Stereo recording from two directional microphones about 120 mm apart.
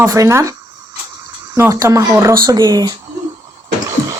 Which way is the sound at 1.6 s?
25° right (ahead or behind).